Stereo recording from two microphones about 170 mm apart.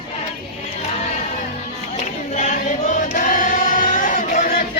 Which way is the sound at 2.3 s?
45° left (ahead or behind).